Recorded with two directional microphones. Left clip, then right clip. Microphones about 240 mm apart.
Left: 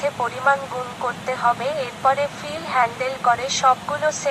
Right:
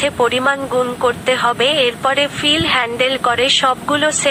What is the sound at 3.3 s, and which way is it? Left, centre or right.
Speech, right.